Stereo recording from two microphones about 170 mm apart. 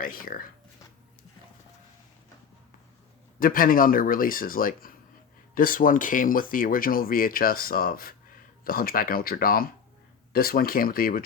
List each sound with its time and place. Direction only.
0.0 s speech: 55° left (ahead or behind)
3.4 s speech: 55° left (ahead or behind)